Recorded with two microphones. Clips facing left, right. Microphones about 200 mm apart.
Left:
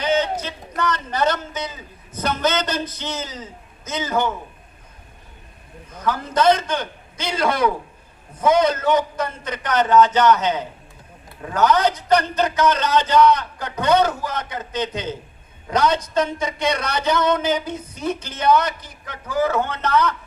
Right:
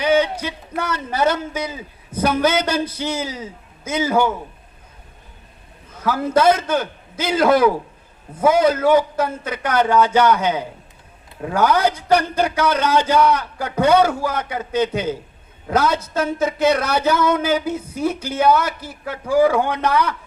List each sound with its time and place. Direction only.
0.0 s a sound: 10° right (ahead or behind)
0.8 s speech: 10° right (ahead or behind)
6.1 s speech: 10° right (ahead or behind)